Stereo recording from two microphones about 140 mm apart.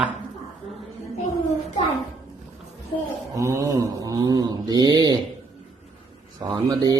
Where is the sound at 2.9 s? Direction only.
35° left (ahead or behind).